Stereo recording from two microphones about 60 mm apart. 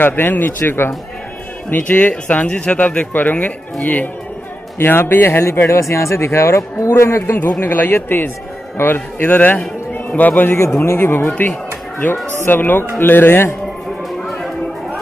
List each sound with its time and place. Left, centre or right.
0.0 s speech: left
1.7 s speech: left
4.7 s speech: left
5.7 s a man's voice: left
7.6 s speech: left
12.4 s speech: left